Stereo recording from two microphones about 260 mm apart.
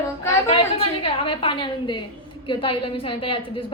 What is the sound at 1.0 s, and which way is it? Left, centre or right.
A woman's voice, centre.